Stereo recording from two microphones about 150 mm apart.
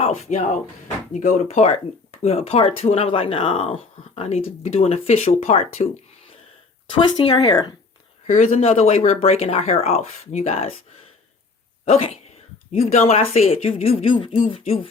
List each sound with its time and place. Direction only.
0.3 s speech: 55° left (ahead or behind)
1.1 s speech: 65° left (ahead or behind)
1.5 s speech: 45° left (ahead or behind)
6.9 s speech: 30° left (ahead or behind)
8.3 s speech: 50° left (ahead or behind)
11.9 s speech: 45° left (ahead or behind)